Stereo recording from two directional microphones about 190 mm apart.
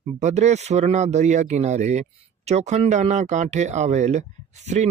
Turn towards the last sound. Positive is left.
turn(degrees=-35)  # may be behind; listen again after turning